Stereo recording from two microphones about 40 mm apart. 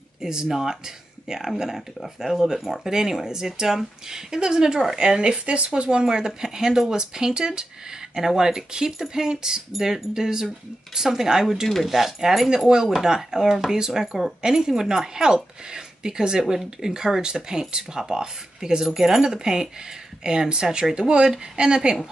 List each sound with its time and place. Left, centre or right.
0.2 s speech: centre
4.9 s speech: centre
18.9 s speech: centre; by 21.9 s right